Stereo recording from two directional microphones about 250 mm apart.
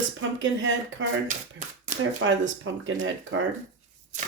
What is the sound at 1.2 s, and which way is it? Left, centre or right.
Shuffling cards, right.